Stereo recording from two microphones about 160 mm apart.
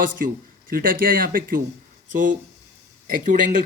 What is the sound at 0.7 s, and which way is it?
Speech, 60° right (ahead or behind).